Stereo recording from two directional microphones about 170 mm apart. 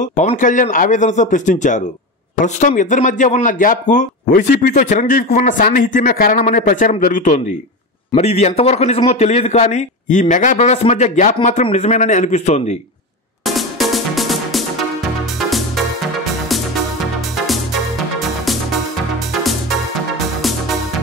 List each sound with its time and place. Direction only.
0.0 s speech: 45° left (ahead or behind)
8.1 s a man's voice: 40° left (ahead or behind)
13.5 s music: centre (ahead or behind)